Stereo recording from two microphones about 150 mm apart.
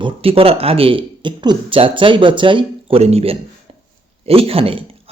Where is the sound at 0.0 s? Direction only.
40° right (ahead or behind).